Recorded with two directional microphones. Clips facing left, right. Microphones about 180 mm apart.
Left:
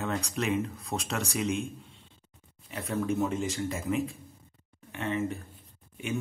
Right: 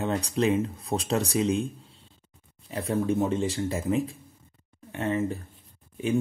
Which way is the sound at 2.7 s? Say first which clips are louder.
Right 4 dB; 30° right (ahead or behind).